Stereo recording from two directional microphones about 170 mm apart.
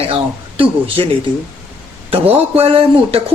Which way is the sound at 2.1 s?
35° right (ahead or behind).